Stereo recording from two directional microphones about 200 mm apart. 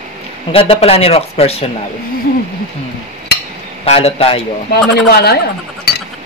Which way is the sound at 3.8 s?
30° left (ahead or behind).